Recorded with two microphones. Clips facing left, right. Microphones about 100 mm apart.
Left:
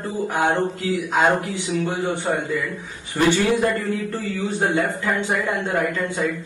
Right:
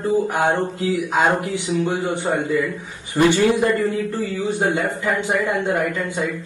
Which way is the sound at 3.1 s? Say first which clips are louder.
Right 2 dB; 15° right (ahead or behind).